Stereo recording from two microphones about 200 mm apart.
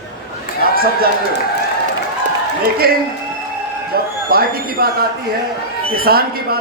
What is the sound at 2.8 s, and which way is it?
Speech, 50° right (ahead or behind).